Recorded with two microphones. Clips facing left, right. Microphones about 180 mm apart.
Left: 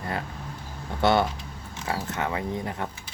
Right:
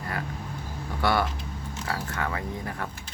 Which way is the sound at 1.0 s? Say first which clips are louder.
Left 4 dB; 25° left (ahead or behind).